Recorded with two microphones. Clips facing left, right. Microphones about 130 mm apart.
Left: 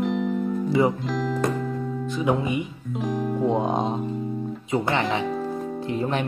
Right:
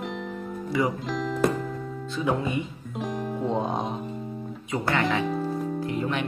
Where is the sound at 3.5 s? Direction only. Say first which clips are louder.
Left 3 dB; 20° left (ahead or behind).